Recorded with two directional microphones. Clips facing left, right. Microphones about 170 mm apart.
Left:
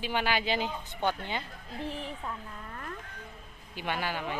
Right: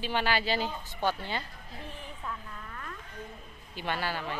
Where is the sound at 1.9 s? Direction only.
90° left.